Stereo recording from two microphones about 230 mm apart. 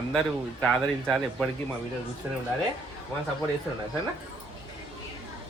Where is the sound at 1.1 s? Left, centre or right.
Centre.